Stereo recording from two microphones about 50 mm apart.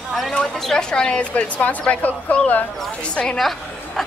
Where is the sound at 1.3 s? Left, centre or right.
Left.